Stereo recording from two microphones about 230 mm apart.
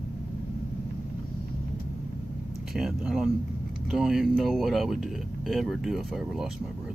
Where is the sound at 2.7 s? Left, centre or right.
Centre.